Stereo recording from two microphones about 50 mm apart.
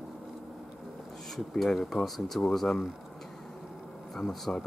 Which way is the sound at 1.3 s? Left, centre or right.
Centre.